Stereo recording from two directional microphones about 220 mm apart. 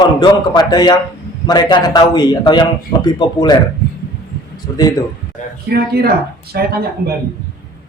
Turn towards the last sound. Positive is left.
turn(degrees=-45)  # may be behind; listen again after turning